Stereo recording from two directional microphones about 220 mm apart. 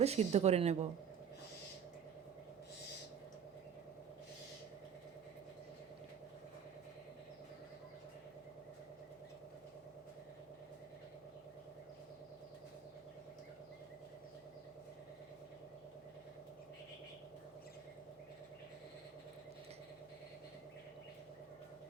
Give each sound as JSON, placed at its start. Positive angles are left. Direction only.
{"t": 0.0, "sound": "speech", "side_deg": -30}